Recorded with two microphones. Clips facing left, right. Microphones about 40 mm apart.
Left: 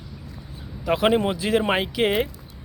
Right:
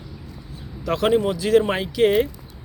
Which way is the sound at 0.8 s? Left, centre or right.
Centre.